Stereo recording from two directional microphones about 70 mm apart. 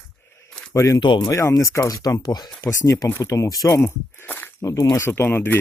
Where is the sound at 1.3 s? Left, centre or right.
Left.